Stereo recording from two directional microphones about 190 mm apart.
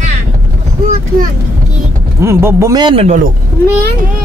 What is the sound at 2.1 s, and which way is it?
Speech, 15° right (ahead or behind).